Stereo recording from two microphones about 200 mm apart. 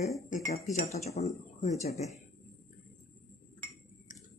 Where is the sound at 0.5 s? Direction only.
35° left (ahead or behind).